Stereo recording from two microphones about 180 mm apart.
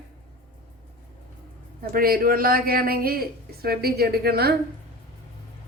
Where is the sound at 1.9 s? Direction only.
55° right (ahead or behind).